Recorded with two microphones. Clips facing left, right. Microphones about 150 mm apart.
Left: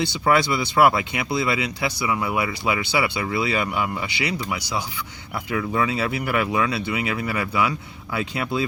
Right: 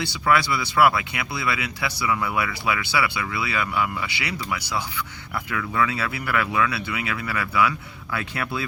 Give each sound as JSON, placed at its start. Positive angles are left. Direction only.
{"t": 0.0, "sound": "speech", "side_deg": 20}